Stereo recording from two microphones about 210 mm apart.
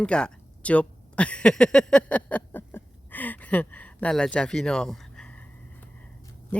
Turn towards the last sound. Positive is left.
turn(degrees=5)  # may be behind; listen again after turning